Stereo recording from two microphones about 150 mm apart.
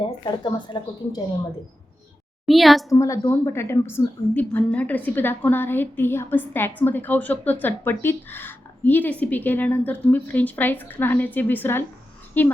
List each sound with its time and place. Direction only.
0.0 s a woman's voice: 30° left (ahead or behind)
2.5 s a woman's voice: centre (ahead or behind)
2.9 s a woman's voice: 20° left (ahead or behind)